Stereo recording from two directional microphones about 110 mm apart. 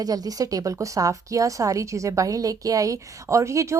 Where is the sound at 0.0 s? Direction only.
35° right (ahead or behind).